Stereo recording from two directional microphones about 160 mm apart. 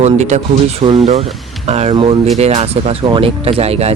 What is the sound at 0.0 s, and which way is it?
Speech, 45° right (ahead or behind).